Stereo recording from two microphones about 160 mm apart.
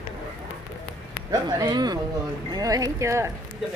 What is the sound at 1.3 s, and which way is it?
Speech, 25° right (ahead or behind).